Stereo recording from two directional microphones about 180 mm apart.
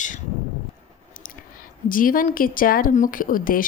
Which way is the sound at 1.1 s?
50° left (ahead or behind).